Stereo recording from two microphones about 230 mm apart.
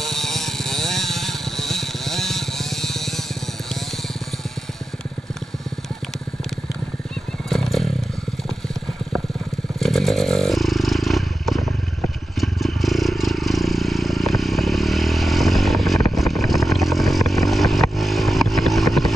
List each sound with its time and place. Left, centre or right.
0.0 s vehicle: centre
7.4 s motorcycle: centre
9.8 s motorcycle: centre
16.2 s vehicle: centre